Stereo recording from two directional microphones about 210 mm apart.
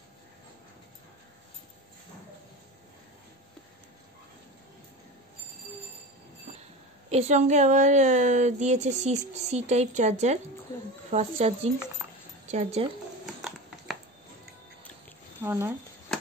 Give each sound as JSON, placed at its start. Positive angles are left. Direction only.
{"t": 7.1, "sound": "speech", "side_deg": -30}
{"t": 12.0, "sound": "a sound", "side_deg": -10}
{"t": 12.4, "sound": "speech", "side_deg": -30}
{"t": 13.2, "sound": "bird", "side_deg": 0}
{"t": 15.4, "sound": "speech", "side_deg": -10}